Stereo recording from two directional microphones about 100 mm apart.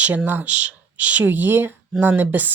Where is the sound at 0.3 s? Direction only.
15° right (ahead or behind).